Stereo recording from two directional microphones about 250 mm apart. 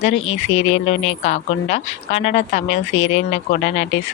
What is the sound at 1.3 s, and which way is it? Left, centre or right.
Speech, left.